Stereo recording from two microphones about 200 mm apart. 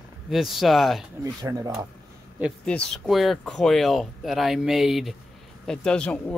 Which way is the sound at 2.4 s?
5° left (ahead or behind).